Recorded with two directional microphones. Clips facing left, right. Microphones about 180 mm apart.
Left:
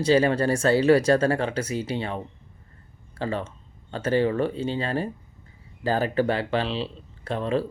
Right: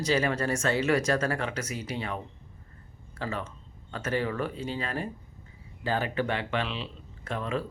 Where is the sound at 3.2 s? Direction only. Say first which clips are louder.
Left 6 dB; 30° left (ahead or behind).